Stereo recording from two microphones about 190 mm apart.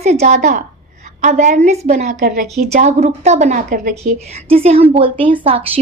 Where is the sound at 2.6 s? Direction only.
50° right (ahead or behind).